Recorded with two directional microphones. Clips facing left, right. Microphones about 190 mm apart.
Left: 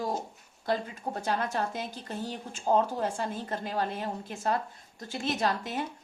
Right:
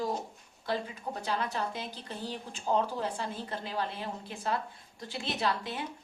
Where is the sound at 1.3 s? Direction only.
50° left (ahead or behind).